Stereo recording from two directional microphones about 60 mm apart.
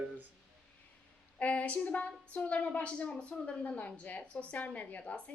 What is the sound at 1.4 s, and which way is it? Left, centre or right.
A woman's voice, left.